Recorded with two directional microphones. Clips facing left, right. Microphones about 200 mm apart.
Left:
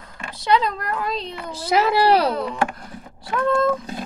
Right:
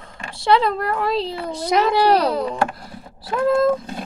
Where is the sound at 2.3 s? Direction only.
35° right (ahead or behind).